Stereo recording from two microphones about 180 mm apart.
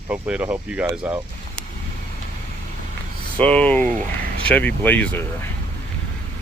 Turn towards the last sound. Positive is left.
turn(degrees=10)  # may be behind; listen again after turning